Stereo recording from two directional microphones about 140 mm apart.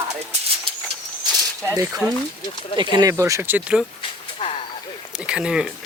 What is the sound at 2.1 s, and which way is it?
Speech, 35° left (ahead or behind).